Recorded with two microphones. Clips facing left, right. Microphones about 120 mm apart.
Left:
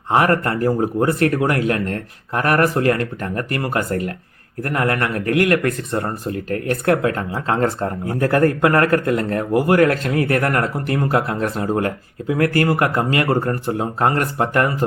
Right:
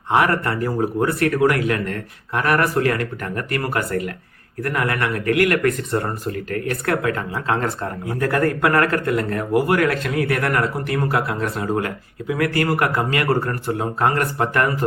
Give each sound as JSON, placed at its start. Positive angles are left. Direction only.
{"t": 0.1, "sound": "speech", "side_deg": 40}
{"t": 2.7, "sound": "speech", "side_deg": 30}
{"t": 4.6, "sound": "speech", "side_deg": 40}